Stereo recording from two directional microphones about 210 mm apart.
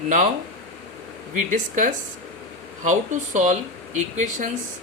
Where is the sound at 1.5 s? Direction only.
40° right (ahead or behind).